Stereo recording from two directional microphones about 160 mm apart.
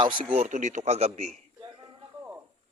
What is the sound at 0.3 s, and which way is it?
Speech, 50° right (ahead or behind).